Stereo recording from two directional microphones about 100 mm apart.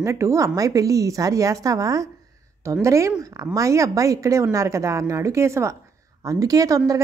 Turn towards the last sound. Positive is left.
turn(degrees=-35)  # may be behind; listen again after turning